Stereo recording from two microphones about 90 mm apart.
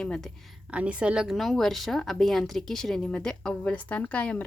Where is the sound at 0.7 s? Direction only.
15° right (ahead or behind).